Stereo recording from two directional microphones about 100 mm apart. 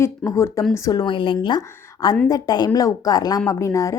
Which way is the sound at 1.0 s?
55° left (ahead or behind).